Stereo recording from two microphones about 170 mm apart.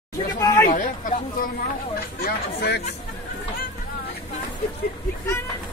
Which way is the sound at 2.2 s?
70° left (ahead or behind).